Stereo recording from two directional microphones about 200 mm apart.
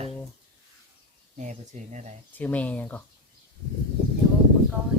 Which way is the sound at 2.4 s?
5° left (ahead or behind).